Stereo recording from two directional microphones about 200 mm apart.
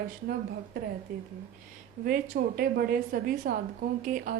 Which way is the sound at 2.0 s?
45° right (ahead or behind).